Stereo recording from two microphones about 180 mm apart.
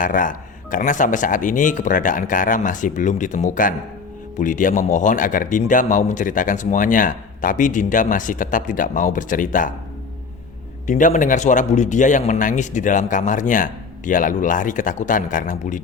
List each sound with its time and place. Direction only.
0.0 s a man's voice: 45° left (ahead or behind)
10.8 s a man's voice: 45° left (ahead or behind)